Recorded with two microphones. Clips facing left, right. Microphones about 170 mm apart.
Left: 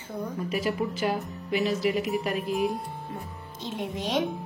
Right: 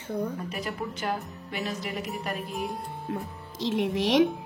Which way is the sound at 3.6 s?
90° right.